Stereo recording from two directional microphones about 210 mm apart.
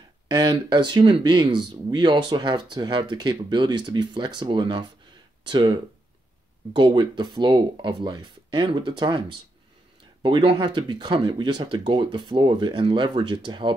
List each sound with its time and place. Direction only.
0.3 s speech: 20° right (ahead or behind)